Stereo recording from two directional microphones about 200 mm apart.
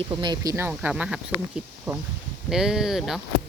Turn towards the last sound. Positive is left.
turn(degrees=0)  # may be behind; listen again after turning